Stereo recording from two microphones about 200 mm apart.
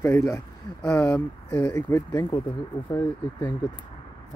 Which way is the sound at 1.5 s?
15° left (ahead or behind).